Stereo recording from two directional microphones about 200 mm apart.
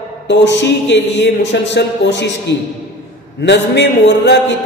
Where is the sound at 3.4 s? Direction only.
60° left (ahead or behind).